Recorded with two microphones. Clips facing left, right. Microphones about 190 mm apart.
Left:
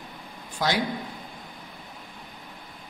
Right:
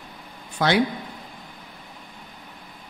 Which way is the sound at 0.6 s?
60° right (ahead or behind).